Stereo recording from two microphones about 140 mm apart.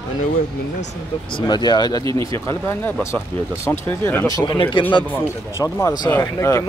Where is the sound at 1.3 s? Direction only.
30° left (ahead or behind); by 4.3 s 15° left (ahead or behind).